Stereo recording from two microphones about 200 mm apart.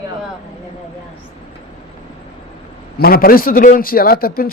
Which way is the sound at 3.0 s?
50° left (ahead or behind).